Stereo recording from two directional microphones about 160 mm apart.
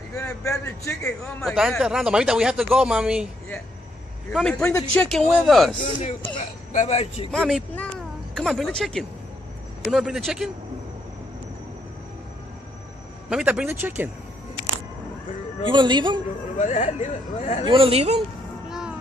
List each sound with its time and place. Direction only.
0.1 s a man's voice: 20° left (ahead or behind)
1.2 s speech: centre (ahead or behind)
4.3 s speech: 5° left (ahead or behind)
4.9 s speech: 15° left (ahead or behind)
5.4 s speech: centre (ahead or behind)
6.7 s a man's voice: 45° left (ahead or behind)
7.2 s speech: centre (ahead or behind)
7.7 s a sound: 5° left (ahead or behind)
9.8 s speech: centre (ahead or behind)
13.3 s speech: 5° right (ahead or behind)
15.6 s speech: 30° right (ahead or behind)
16.5 s speech: 45° left (ahead or behind)
17.6 s speech: 35° right (ahead or behind)
18.7 s music: 5° right (ahead or behind)